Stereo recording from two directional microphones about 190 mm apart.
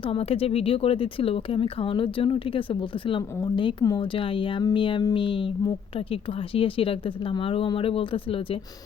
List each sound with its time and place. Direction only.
0.1 s speech: 30° left (ahead or behind)